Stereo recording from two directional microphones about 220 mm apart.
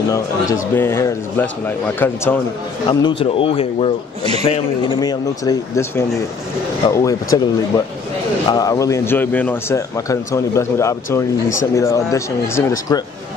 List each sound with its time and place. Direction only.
0.1 s speech: 15° left (ahead or behind)
2.9 s speech: 20° left (ahead or behind)